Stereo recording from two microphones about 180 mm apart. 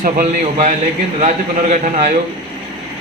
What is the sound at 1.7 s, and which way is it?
Speech, 45° right (ahead or behind).